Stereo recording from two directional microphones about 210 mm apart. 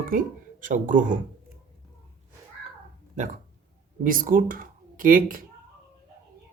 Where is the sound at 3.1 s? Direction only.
35° right (ahead or behind).